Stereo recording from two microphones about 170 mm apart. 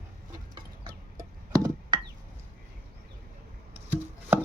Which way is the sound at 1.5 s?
20° right (ahead or behind).